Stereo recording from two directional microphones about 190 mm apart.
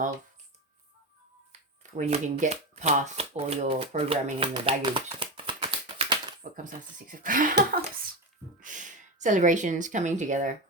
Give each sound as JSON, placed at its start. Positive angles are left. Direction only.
{"t": 1.8, "sound": "speech", "side_deg": -40}
{"t": 6.7, "sound": "speech", "side_deg": -45}